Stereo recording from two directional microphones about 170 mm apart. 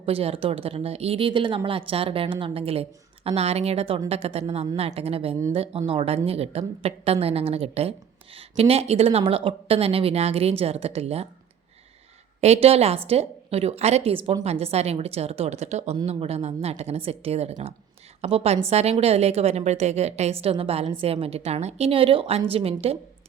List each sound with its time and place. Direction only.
0.0 s a woman's voice: 35° right (ahead or behind)
12.4 s a woman's voice: 35° right (ahead or behind)